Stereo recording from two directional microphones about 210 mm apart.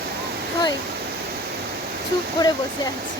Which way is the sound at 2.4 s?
20° left (ahead or behind).